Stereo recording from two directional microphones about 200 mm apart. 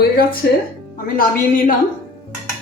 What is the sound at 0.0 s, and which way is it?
A woman's voice, 50° left (ahead or behind).